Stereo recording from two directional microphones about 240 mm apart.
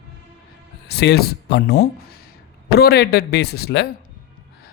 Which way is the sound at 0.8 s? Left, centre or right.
Left.